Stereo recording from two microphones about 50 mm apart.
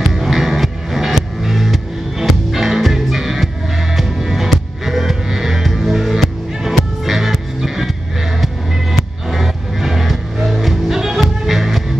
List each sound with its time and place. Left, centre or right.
0.1 s music: centre
9.3 s music: centre